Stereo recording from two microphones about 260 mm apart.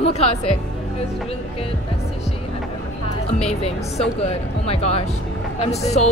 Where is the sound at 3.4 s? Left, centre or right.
Left.